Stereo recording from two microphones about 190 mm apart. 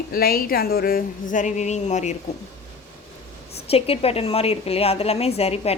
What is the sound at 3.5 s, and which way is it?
A woman's voice, 30° left (ahead or behind).